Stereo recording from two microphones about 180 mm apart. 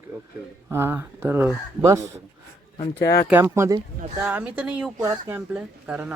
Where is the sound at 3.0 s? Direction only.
60° left (ahead or behind).